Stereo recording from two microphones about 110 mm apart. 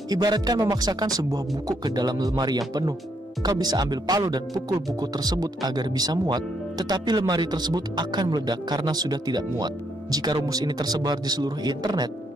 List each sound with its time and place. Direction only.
0.1 s speech: 40° right (ahead or behind)